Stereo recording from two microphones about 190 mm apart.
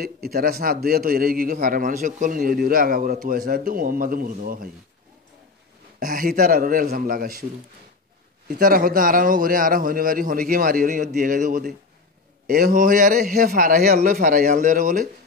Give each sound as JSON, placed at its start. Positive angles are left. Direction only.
{"t": 0.0, "sound": "a man's voice", "side_deg": -55}
{"t": 5.9, "sound": "a man's voice", "side_deg": -50}
{"t": 8.5, "sound": "a man's voice", "side_deg": -50}